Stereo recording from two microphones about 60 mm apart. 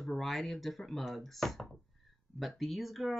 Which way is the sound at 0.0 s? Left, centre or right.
Centre.